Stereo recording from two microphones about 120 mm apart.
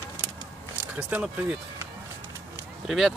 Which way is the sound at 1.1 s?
15° right (ahead or behind).